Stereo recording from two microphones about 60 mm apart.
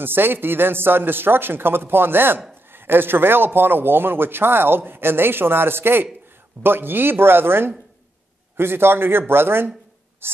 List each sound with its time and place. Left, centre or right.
0.0 s a man's voice: right